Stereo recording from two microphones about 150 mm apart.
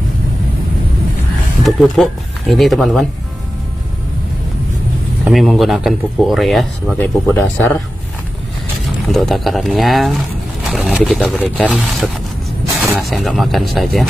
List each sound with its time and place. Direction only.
1.6 s speech: centre (ahead or behind)
5.2 s speech: centre (ahead or behind)
7.0 s speech: 15° left (ahead or behind)
9.0 s speech: centre (ahead or behind)